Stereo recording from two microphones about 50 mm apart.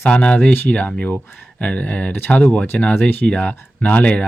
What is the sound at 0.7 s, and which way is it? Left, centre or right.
Speech, centre.